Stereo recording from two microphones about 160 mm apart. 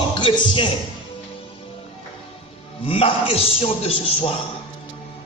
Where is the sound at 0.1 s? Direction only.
35° left (ahead or behind).